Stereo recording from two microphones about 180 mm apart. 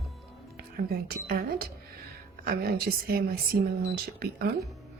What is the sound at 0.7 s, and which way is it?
A woman's voice, 60° right (ahead or behind).